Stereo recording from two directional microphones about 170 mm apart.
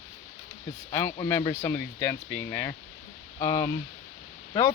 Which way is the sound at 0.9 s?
15° left (ahead or behind).